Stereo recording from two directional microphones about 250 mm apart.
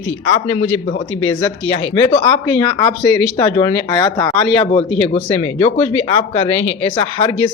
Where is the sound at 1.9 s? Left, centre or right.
Centre.